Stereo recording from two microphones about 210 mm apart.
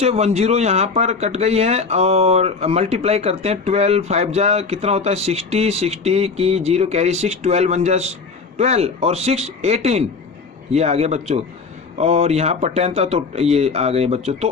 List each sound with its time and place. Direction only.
0.0 s speech: 30° right (ahead or behind)